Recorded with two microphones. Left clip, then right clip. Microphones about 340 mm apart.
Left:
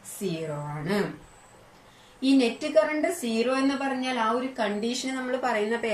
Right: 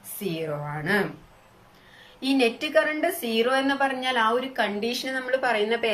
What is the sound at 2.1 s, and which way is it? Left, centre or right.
A woman's voice, right.